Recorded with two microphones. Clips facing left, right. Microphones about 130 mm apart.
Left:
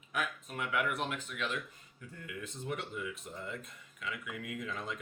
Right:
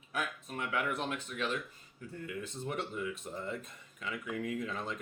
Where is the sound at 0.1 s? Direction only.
35° right (ahead or behind).